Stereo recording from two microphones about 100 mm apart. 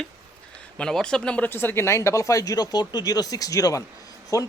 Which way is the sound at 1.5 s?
25° left (ahead or behind).